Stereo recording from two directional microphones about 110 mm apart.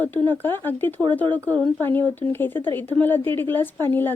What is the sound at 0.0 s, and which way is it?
A woman's voice, 15° left (ahead or behind).